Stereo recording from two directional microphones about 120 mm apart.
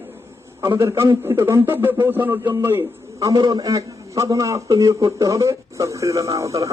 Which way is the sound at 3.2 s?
35° right (ahead or behind).